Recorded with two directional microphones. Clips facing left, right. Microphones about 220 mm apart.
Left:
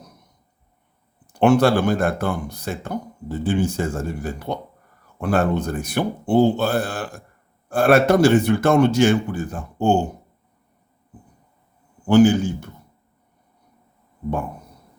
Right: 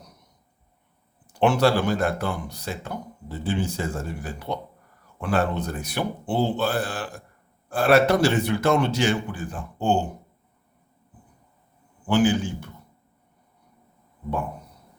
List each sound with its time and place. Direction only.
1.3 s speech: 50° left (ahead or behind)
12.0 s speech: 45° left (ahead or behind)